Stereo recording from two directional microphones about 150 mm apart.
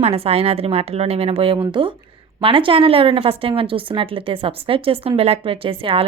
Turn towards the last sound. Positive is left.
turn(degrees=-35)  # may be behind; listen again after turning